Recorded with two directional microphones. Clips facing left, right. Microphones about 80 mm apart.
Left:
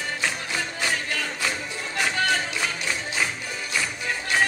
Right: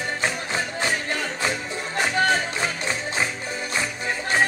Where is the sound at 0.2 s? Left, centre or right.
Right.